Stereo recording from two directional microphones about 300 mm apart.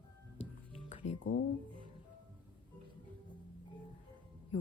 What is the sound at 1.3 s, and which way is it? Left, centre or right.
Speech, left.